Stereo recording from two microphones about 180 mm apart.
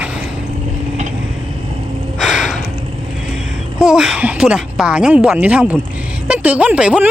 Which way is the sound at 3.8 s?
5° right (ahead or behind).